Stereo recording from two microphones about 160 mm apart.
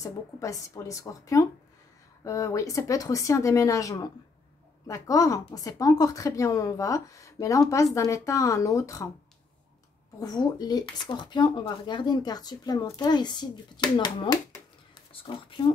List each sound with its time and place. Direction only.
0.0 s speech: 20° left (ahead or behind)
10.2 s speech: 25° left (ahead or behind)